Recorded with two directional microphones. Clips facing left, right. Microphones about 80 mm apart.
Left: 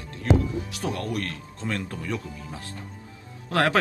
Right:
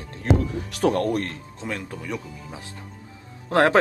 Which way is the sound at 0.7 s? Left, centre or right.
Right.